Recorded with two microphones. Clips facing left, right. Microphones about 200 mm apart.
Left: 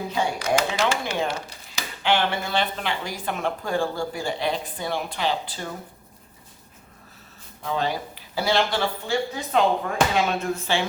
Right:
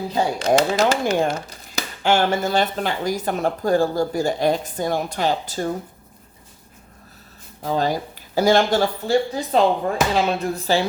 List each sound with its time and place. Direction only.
0.1 s speech: 35° right (ahead or behind)
7.6 s speech: 40° right (ahead or behind)